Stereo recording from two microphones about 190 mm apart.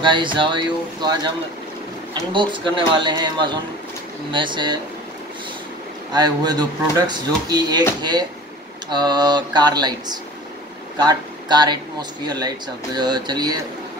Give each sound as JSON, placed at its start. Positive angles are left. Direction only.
{"t": 0.0, "sound": "speech", "side_deg": -25}
{"t": 2.3, "sound": "speech", "side_deg": -25}
{"t": 6.1, "sound": "speech", "side_deg": -20}